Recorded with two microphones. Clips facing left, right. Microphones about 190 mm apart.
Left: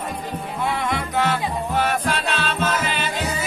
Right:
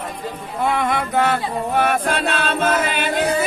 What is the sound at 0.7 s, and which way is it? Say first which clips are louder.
Music: right 4 dB; 55° right (ahead or behind).